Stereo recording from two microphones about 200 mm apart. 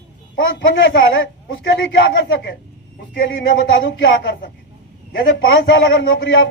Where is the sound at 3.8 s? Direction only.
55° left (ahead or behind).